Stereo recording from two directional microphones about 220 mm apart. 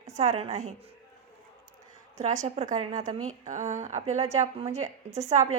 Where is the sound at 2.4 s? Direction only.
30° right (ahead or behind).